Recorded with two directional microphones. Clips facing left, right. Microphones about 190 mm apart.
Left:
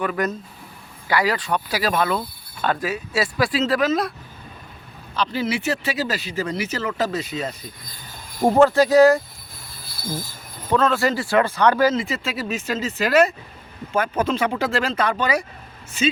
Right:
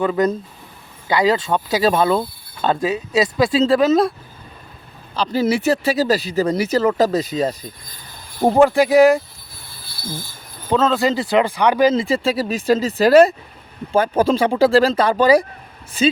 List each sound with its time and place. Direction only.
0.0 s speech: 25° right (ahead or behind)
5.1 s speech: 35° right (ahead or behind)
8.5 s speech: 15° right (ahead or behind)
10.0 s train: 30° right (ahead or behind)
10.7 s speech: 25° right (ahead or behind)
11.9 s speech: 30° right (ahead or behind)